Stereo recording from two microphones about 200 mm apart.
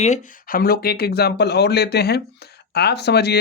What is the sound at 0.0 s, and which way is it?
Speech, 40° left (ahead or behind).